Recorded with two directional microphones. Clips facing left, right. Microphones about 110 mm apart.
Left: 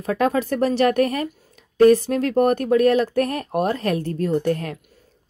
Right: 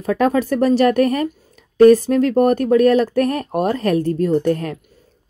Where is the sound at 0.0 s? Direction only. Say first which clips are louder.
Right 4 dB; 35° right (ahead or behind).